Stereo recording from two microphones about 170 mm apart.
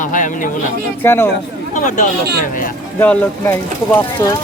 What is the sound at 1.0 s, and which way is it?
Speech, 15° left (ahead or behind).